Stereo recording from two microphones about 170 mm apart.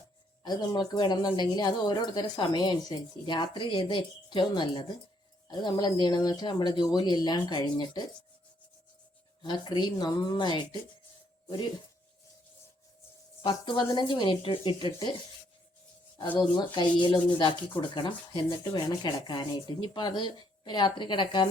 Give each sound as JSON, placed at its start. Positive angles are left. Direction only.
{"t": 0.4, "sound": "speech", "side_deg": 20}
{"t": 9.4, "sound": "speech", "side_deg": 25}
{"t": 13.4, "sound": "speech", "side_deg": 30}
{"t": 16.4, "sound": "speech", "side_deg": 25}